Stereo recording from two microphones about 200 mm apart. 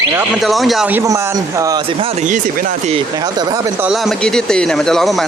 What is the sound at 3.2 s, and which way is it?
Speech, 20° right (ahead or behind).